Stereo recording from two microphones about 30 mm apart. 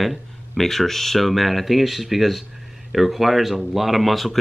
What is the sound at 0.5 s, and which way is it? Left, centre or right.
Speech, centre.